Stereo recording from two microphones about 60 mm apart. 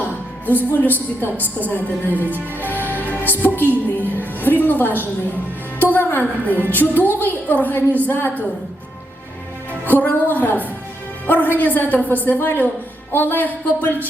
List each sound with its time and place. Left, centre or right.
0.0 s music: left
1.2 s a woman's voice: left
2.2 s music: right
2.6 s music: left
5.8 s a woman's voice: left
9.8 s a woman's voice: left